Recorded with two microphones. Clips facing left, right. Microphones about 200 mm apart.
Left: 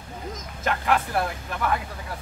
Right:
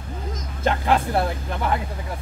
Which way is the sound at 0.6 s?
30° right (ahead or behind).